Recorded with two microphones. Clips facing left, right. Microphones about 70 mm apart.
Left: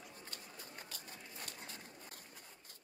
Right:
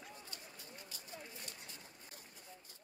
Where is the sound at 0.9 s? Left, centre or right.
Left.